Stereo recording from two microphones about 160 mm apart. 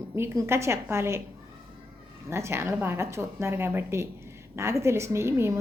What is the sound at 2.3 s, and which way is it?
A woman's voice, 15° right (ahead or behind).